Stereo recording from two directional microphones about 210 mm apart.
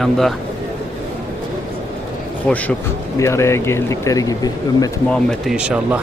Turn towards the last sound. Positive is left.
turn(degrees=-5)  # may be behind; listen again after turning